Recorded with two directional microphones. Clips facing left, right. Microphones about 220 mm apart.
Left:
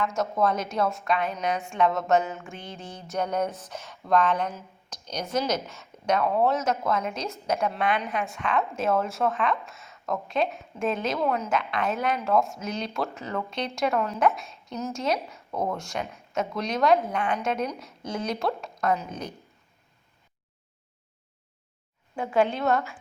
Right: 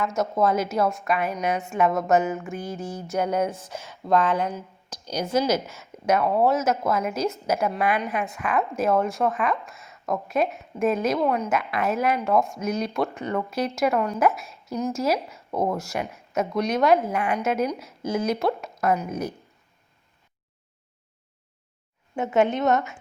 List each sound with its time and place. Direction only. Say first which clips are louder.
0.0 s speech: right 2 dB; centre (ahead or behind)
3.4 s speech: right 3 dB; 30° right (ahead or behind)
5.0 s speech: right 5 dB; 5° right (ahead or behind)
22.2 s speech: right 3 dB; 20° right (ahead or behind)